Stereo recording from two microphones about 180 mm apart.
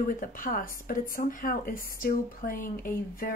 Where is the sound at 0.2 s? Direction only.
50° left (ahead or behind).